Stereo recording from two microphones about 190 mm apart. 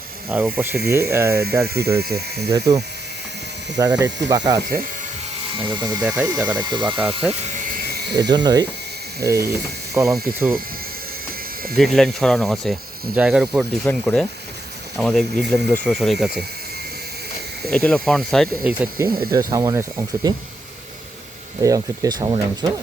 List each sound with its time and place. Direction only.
0.3 s speech: 10° right (ahead or behind)
1.6 s speech: 55° right (ahead or behind)
2.5 s speech: 15° right (ahead or behind)
6.0 s speech: 5° right (ahead or behind)
6.2 s speech: 15° right (ahead or behind)
7.2 s speech: 5° right (ahead or behind)
8.1 s speech: 20° right (ahead or behind)
11.8 s speech: centre (ahead or behind)
17.6 s speech: 5° left (ahead or behind)
18.9 s speech: 15° right (ahead or behind)
21.6 s speech: 20° right (ahead or behind)